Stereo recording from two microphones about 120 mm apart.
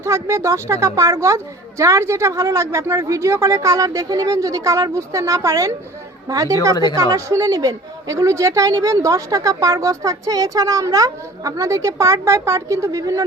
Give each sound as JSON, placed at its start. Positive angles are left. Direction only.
{"t": 0.0, "sound": "a woman's voice", "side_deg": -25}